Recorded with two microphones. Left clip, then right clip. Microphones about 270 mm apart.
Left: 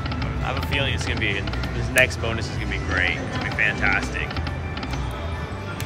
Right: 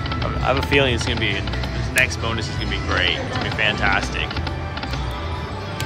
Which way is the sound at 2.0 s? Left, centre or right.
Centre.